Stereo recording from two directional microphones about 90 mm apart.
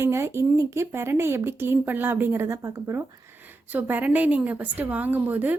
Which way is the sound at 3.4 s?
20° right (ahead or behind).